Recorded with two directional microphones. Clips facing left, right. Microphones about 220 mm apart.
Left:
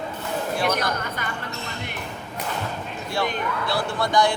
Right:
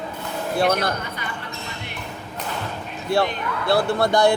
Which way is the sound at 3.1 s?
60° right (ahead or behind).